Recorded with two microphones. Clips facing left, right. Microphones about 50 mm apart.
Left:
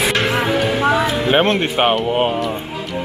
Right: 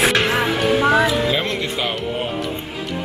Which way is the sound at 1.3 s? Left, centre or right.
Left.